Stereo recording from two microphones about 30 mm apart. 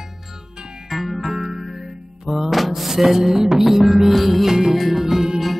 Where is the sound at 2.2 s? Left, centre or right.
Centre.